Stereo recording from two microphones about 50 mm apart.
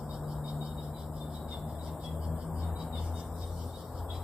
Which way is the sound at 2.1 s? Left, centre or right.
Centre.